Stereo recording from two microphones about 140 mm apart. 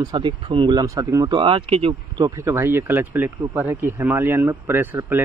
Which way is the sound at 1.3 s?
40° right (ahead or behind).